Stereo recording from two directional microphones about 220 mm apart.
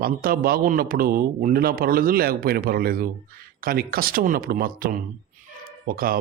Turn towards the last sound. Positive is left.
turn(degrees=-40)  # may be behind; listen again after turning